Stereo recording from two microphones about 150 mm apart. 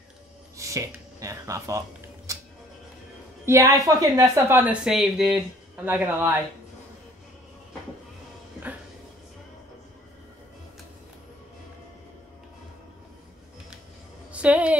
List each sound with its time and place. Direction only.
0.6 s speech: 20° right (ahead or behind)
3.4 s a woman's voice: 20° right (ahead or behind)
14.3 s music: 10° right (ahead or behind)